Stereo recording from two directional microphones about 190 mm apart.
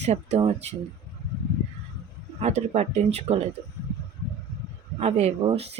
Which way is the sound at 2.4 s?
35° right (ahead or behind).